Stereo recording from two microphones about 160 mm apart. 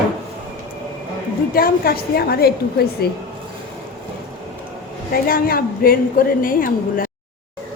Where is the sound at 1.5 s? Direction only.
70° left (ahead or behind).